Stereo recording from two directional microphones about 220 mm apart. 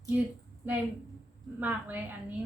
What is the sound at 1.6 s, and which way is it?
Speech, 10° right (ahead or behind).